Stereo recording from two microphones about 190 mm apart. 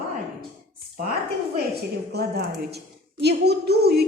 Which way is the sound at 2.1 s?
60° right (ahead or behind).